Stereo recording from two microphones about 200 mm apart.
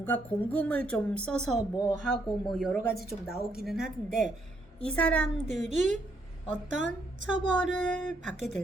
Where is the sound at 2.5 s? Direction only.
Centre (ahead or behind).